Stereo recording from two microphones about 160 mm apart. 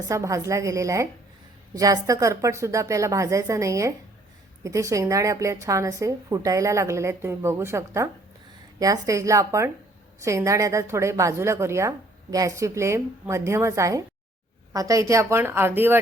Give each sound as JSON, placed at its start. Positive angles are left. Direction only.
{"t": 0.0, "sound": "a woman's voice", "side_deg": -20}